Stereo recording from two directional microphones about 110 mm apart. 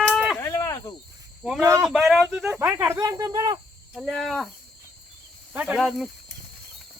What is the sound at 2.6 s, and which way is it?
Speech, 25° right (ahead or behind).